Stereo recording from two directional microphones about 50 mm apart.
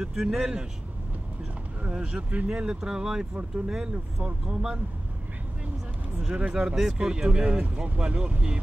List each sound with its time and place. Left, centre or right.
0.0 s speech: centre
1.8 s speech: centre
6.3 s speech: centre